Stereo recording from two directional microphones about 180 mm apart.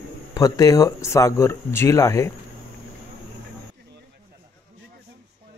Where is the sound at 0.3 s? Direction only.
20° left (ahead or behind).